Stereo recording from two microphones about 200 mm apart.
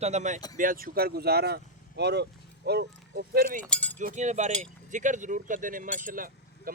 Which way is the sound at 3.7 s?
10° left (ahead or behind).